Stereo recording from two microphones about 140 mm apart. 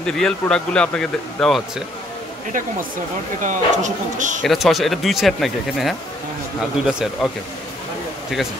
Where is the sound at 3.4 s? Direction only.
65° right (ahead or behind).